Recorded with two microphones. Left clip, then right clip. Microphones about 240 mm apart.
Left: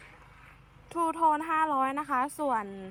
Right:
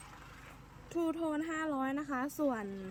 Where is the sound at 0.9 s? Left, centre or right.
Left.